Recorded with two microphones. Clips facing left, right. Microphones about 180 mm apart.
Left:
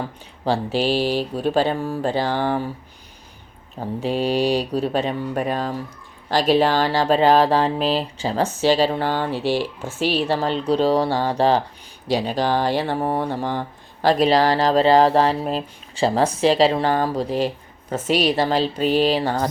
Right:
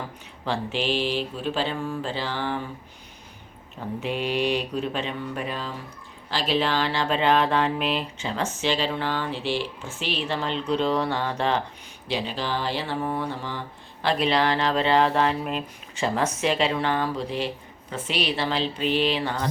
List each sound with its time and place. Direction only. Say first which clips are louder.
0.4 s speech: left 6 dB; 35° left (ahead or behind)
3.8 s speech: left 6 dB; 35° left (ahead or behind)